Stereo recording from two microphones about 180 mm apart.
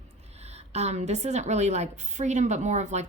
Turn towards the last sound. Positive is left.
turn(degrees=-40)  # may be behind; listen again after turning